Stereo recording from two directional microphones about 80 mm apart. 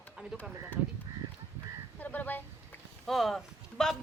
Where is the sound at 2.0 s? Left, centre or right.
Left.